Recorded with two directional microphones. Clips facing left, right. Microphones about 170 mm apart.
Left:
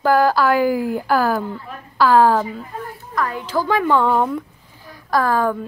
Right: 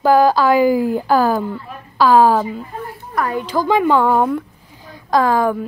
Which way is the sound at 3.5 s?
15° right (ahead or behind).